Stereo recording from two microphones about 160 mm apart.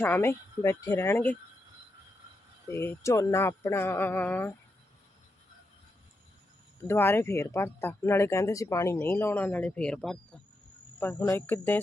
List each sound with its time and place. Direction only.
0.0 s speech: 15° left (ahead or behind)
2.6 s speech: 15° left (ahead or behind)
6.7 s speech: 15° left (ahead or behind)
11.3 s speech: 15° left (ahead or behind)